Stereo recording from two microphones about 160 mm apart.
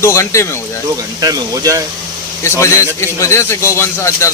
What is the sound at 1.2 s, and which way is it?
Speech, 20° right (ahead or behind).